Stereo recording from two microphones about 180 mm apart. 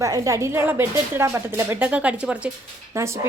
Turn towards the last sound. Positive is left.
turn(degrees=-15)  # may be behind; listen again after turning